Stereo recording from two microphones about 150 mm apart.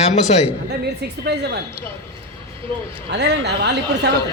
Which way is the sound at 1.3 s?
90° right.